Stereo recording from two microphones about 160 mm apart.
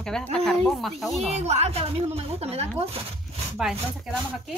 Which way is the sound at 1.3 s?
45° right (ahead or behind).